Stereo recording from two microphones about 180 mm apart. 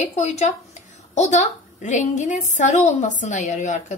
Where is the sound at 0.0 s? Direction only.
40° left (ahead or behind).